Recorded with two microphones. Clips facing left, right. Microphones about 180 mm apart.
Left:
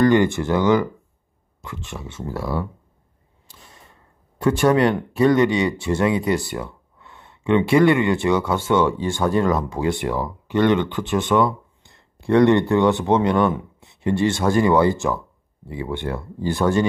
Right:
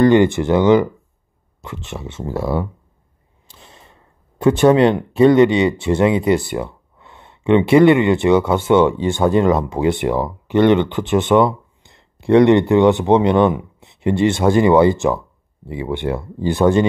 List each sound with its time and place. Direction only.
0.0 s speech: 20° right (ahead or behind)
3.4 s a sound: 25° right (ahead or behind)
4.4 s speech: 20° right (ahead or behind)